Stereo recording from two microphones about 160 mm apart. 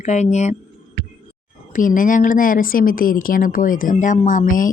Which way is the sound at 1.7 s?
55° left (ahead or behind).